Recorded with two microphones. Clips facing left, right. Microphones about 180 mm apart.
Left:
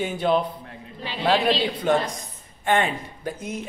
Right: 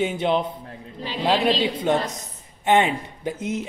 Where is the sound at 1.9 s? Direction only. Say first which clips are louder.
Even; 20° right (ahead or behind).